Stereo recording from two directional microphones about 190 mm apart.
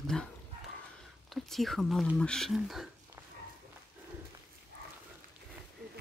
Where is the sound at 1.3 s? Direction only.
Centre (ahead or behind).